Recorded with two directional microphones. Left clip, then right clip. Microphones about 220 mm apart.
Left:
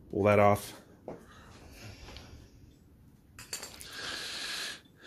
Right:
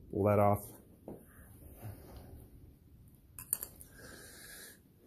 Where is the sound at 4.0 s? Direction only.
10° left (ahead or behind).